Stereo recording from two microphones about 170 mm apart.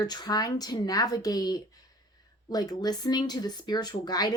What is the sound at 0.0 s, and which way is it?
Speech, 25° left (ahead or behind).